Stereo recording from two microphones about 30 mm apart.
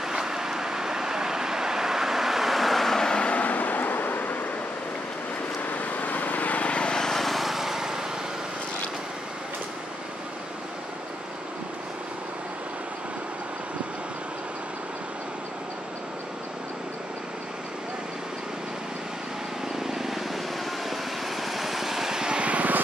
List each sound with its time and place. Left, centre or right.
0.0 s vehicle: centre
3.0 s vehicle: left
3.3 s vehicle: left
5.6 s vehicle: left
6.6 s vehicle: left
7.0 s vehicle: centre
7.2 s lawn mower: centre
7.5 s lawn mower: centre
19.7 s vehicle: centre
22.4 s vehicle: right